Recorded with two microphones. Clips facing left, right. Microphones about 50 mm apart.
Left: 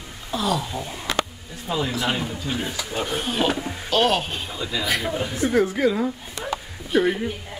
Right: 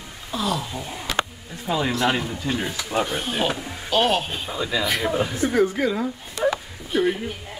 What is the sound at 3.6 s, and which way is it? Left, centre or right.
Music, centre.